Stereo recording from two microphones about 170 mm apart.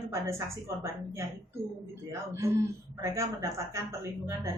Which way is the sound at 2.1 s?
15° right (ahead or behind).